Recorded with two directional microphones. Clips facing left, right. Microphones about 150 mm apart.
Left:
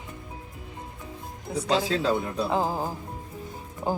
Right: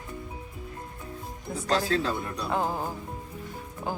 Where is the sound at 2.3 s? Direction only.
25° left (ahead or behind).